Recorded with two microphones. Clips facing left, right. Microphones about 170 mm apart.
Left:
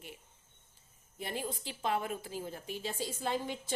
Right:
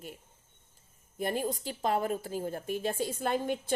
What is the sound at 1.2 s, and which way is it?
A woman's voice, 50° right (ahead or behind).